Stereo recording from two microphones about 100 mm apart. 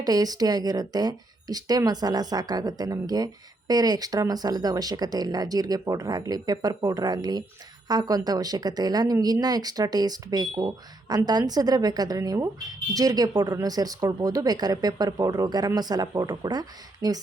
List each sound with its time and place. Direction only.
0.0 s speech: 40° right (ahead or behind)